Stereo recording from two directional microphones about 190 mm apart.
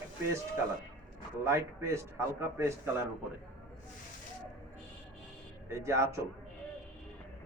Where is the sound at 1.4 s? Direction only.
15° right (ahead or behind).